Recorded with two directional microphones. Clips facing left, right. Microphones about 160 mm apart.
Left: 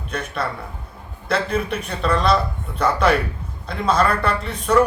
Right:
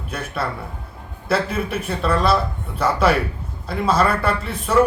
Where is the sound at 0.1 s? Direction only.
5° right (ahead or behind).